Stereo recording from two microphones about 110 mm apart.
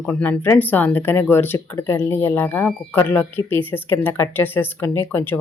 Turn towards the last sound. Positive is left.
turn(degrees=20)  # may be behind; listen again after turning